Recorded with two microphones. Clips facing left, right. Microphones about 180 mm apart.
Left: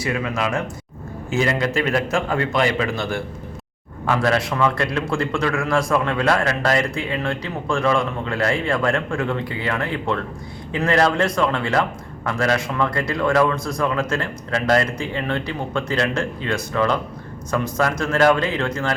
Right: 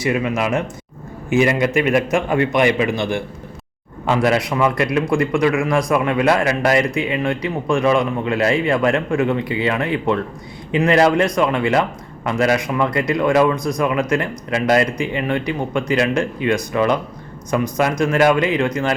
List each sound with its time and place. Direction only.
0.0 s a man's voice: 20° right (ahead or behind)